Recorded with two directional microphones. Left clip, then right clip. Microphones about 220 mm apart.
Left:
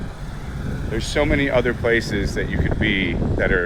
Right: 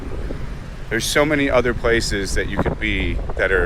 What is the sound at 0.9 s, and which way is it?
Speech, 30° right (ahead or behind).